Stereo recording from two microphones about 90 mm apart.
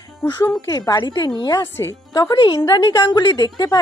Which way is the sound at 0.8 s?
50° left (ahead or behind).